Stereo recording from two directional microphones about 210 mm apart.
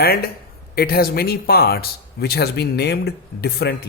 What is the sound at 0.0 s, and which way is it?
Speech, 45° left (ahead or behind).